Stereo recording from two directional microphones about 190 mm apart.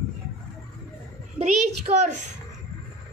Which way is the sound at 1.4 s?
35° right (ahead or behind).